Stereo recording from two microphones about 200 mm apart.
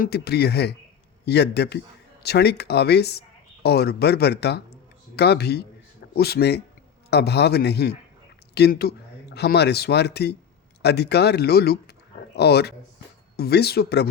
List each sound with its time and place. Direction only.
0.0 s a man's voice: 55° left (ahead or behind)